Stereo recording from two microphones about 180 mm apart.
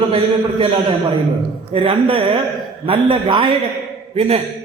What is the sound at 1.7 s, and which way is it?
A man's voice, 30° right (ahead or behind).